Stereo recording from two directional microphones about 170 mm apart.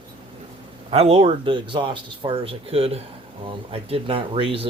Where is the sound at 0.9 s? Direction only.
35° right (ahead or behind).